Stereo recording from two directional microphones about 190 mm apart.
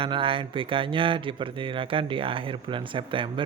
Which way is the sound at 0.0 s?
25° right (ahead or behind).